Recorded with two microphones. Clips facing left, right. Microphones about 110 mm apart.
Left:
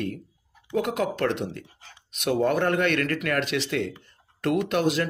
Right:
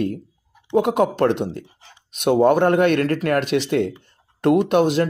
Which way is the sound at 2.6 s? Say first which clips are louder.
Right 7 dB; 45° right (ahead or behind).